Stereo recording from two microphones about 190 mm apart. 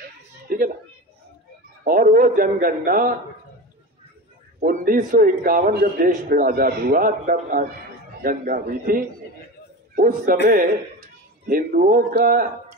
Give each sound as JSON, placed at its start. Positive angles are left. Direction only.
{"t": 0.5, "sound": "a sound", "side_deg": -50}
{"t": 1.9, "sound": "a man's voice", "side_deg": -50}
{"t": 4.6, "sound": "a man's voice", "side_deg": -45}
{"t": 11.4, "sound": "a man's voice", "side_deg": -50}